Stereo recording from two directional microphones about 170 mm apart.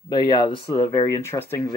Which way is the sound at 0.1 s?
25° left (ahead or behind).